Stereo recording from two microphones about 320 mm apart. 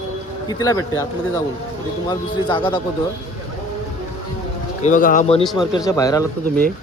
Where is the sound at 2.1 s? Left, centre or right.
Centre.